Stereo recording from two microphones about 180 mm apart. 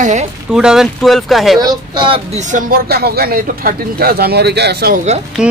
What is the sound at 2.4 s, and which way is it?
Speech, 45° right (ahead or behind).